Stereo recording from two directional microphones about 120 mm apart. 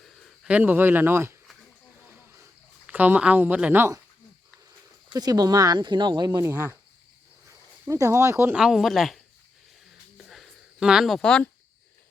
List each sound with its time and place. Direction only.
0.4 s speech: 15° right (ahead or behind)
2.8 s speech: 15° right (ahead or behind)
5.1 s speech: 30° right (ahead or behind)
6.4 s speech: 20° right (ahead or behind)
7.4 s a sound: 25° right (ahead or behind)
8.5 s speech: 5° right (ahead or behind)
10.2 s a sound: centre (ahead or behind)